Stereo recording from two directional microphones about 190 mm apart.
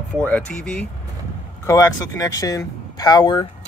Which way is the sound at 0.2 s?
5° left (ahead or behind).